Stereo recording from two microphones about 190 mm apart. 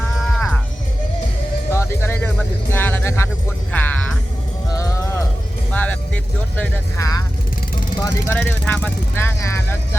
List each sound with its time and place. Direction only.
0.2 s music: centre (ahead or behind)
1.7 s music: 15° left (ahead or behind)
5.7 s vehicle: 10° left (ahead or behind)
6.6 s speech: 15° left (ahead or behind)
8.3 s speech: 10° left (ahead or behind)